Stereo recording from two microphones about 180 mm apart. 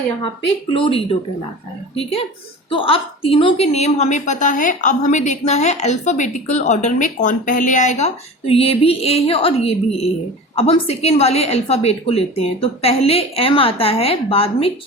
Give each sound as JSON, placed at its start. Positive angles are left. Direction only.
{"t": 0.7, "sound": "a woman's voice", "side_deg": 30}